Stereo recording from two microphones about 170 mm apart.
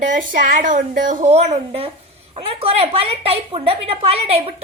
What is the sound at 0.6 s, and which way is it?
A woman's voice, 50° right (ahead or behind).